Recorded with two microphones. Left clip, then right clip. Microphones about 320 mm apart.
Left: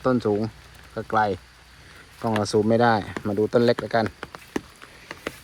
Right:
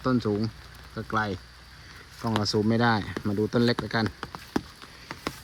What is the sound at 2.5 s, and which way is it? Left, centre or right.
Speech, left.